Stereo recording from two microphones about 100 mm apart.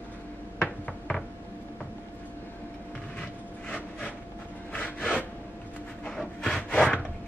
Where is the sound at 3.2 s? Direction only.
10° left (ahead or behind).